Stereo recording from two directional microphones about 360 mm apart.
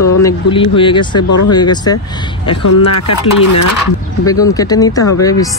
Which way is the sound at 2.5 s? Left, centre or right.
Left.